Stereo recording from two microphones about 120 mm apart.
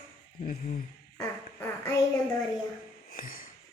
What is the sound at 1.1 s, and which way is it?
Speech, 20° left (ahead or behind).